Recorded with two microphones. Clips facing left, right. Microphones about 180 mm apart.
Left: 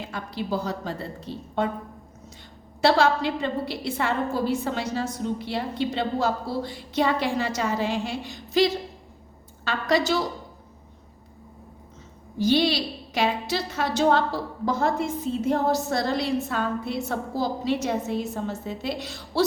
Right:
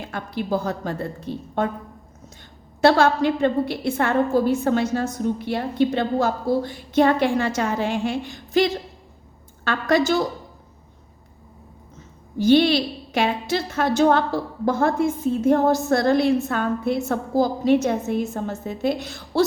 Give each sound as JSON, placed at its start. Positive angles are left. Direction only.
{"t": 0.1, "sound": "a woman's voice", "side_deg": -50}
{"t": 2.8, "sound": "a woman's voice", "side_deg": -50}
{"t": 12.4, "sound": "a woman's voice", "side_deg": -55}